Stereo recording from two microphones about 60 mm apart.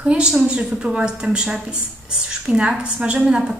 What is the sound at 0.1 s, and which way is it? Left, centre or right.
A woman's voice, centre.